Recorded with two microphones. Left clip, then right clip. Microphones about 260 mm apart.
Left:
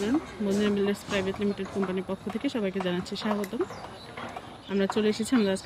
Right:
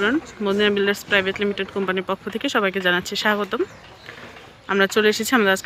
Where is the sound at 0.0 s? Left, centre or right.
Centre.